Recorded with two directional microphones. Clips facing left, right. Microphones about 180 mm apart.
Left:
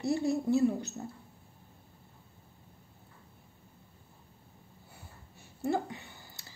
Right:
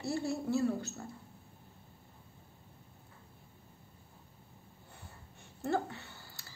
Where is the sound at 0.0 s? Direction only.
20° left (ahead or behind).